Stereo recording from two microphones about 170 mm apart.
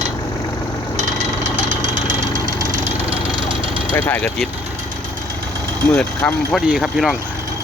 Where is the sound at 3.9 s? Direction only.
10° left (ahead or behind).